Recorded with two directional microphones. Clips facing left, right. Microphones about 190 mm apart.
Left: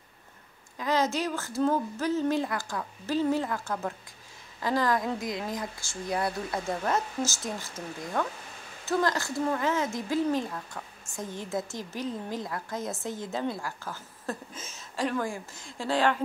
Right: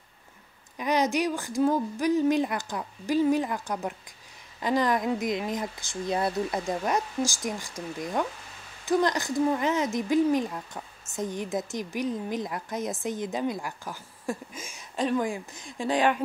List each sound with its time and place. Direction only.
0.7 s a woman's voice: 15° right (ahead or behind)